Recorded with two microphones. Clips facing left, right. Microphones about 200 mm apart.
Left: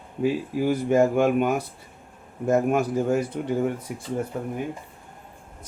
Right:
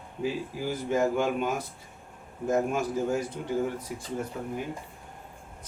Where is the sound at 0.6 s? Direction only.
60° left (ahead or behind).